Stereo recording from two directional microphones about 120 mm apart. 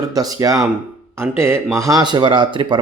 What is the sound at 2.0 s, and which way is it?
Mantra, 40° right (ahead or behind).